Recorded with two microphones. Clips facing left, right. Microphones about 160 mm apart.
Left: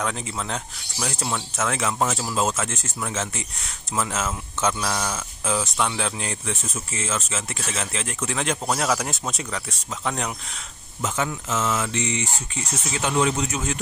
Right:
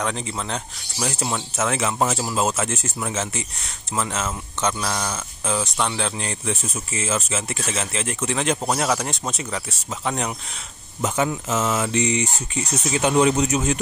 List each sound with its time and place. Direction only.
0.0 s speech: centre (ahead or behind)
0.9 s speech: 15° right (ahead or behind)
1.7 s speech: 5° right (ahead or behind)
11.0 s speech: 20° right (ahead or behind)